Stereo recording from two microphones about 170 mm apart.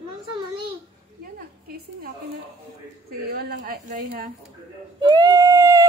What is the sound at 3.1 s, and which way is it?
A woman's voice, 65° right (ahead or behind).